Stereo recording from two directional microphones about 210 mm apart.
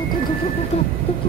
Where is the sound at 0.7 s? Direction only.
30° left (ahead or behind).